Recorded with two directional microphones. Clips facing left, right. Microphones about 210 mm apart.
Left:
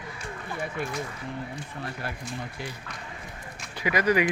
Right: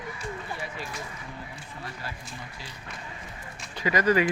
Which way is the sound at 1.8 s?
60° left (ahead or behind).